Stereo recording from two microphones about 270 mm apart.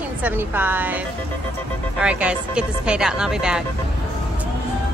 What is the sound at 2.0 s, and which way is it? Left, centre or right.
Speech, centre.